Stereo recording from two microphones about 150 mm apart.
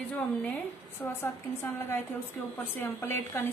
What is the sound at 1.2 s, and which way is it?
Speech, 15° left (ahead or behind).